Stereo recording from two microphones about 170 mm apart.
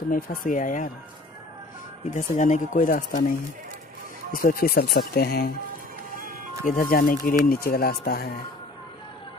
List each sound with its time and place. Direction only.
0.1 s speech: 55° left (ahead or behind)
2.0 s speech: 45° left (ahead or behind); by 5.5 s 65° left (ahead or behind)
6.6 s speech: 60° left (ahead or behind)